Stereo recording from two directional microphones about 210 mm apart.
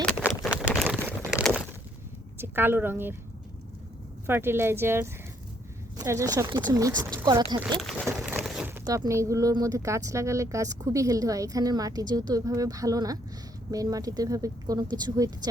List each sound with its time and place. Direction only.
0.5 s a sound: 5° right (ahead or behind)
2.4 s a woman's voice: 10° right (ahead or behind)
4.3 s speech: 10° right (ahead or behind)
7.8 s speech: centre (ahead or behind); by 15.3 s 20° right (ahead or behind)